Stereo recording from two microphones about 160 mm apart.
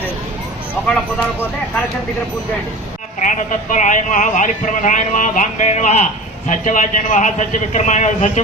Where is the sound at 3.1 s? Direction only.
50° left (ahead or behind).